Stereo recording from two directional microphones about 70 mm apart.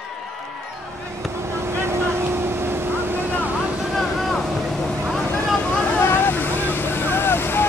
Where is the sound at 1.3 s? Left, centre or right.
Right.